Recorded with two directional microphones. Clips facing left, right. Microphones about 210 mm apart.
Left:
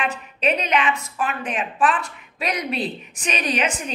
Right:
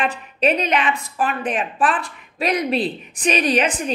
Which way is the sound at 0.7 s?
35° right (ahead or behind).